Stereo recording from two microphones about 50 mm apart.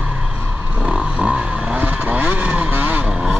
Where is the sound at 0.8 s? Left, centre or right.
Centre.